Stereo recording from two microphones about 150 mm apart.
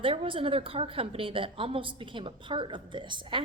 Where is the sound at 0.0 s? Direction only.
35° right (ahead or behind).